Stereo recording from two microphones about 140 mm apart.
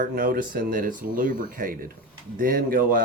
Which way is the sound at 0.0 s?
80° right.